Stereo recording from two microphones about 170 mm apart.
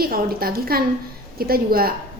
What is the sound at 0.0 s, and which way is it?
A woman's voice, 60° right (ahead or behind).